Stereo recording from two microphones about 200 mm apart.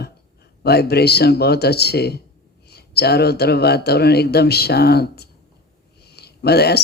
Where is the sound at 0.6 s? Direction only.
55° left (ahead or behind).